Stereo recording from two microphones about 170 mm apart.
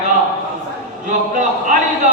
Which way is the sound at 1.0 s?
50° right (ahead or behind).